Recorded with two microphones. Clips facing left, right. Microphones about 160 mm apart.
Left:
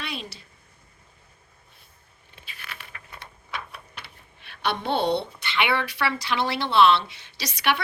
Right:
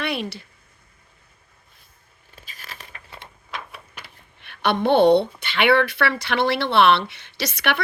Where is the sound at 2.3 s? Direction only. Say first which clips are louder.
Right 1 dB; 40° right (ahead or behind).